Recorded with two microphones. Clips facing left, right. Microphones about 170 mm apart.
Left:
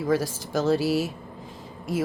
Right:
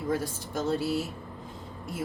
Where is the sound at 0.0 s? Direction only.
90° left.